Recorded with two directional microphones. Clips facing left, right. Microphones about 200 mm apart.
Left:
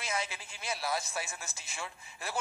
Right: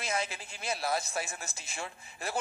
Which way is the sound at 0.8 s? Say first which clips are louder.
Right 2 dB; 50° right (ahead or behind).